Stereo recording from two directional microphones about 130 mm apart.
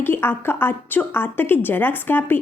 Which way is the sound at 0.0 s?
15° left (ahead or behind).